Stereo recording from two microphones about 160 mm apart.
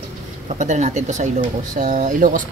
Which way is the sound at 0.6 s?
50° right (ahead or behind).